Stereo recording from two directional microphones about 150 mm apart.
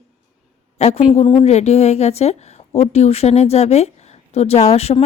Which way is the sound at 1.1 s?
35° left (ahead or behind).